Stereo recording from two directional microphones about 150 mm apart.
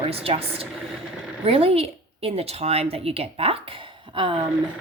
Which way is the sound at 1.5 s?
40° right (ahead or behind).